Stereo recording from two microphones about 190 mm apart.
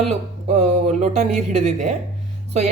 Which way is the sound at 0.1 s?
35° right (ahead or behind).